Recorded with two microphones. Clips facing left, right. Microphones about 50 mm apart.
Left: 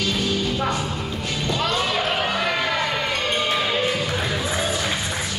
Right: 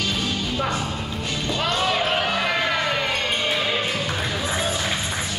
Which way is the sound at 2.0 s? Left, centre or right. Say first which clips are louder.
Even; centre.